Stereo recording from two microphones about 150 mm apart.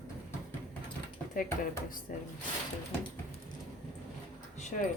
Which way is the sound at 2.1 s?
70° left (ahead or behind).